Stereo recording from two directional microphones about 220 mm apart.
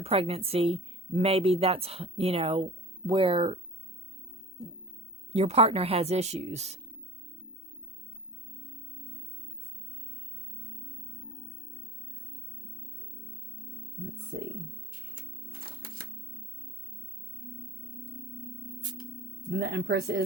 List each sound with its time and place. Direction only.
0.0 s speech: 25° right (ahead or behind)
5.3 s speech: 30° right (ahead or behind)
14.3 s speech: 60° right (ahead or behind)
15.6 s typewriter: 45° right (ahead or behind)
19.5 s speech: 50° right (ahead or behind)